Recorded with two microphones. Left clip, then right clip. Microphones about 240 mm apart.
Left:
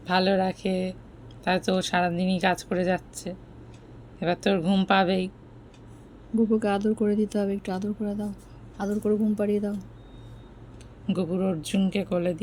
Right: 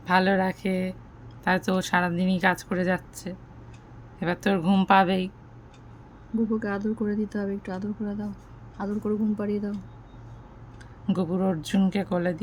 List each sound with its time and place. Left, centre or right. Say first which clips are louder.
0.0 s speech: right 1 dB; right
6.5 s speech: left 7 dB; centre
11.0 s speech: even; right